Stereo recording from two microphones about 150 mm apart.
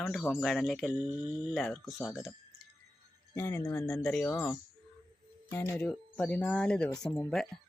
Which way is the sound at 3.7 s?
5° left (ahead or behind).